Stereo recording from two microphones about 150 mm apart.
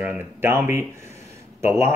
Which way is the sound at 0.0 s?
15° right (ahead or behind).